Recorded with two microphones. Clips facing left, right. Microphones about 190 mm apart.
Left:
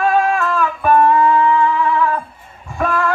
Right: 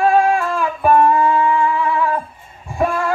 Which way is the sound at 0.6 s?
15° right (ahead or behind).